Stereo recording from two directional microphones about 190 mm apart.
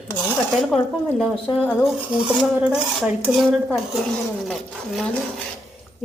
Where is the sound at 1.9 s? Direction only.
5° right (ahead or behind).